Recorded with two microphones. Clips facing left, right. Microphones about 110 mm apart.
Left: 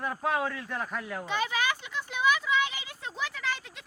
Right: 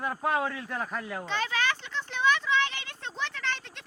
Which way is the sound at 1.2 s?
10° left (ahead or behind).